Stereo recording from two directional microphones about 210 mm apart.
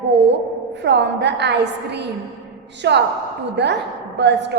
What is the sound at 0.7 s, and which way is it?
A woman's voice, 55° right (ahead or behind).